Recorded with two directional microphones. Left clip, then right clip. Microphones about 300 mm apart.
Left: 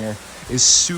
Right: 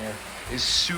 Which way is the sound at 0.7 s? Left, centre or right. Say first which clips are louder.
Left 3 dB; centre.